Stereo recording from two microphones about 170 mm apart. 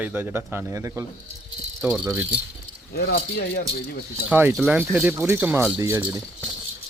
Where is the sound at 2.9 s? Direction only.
80° left.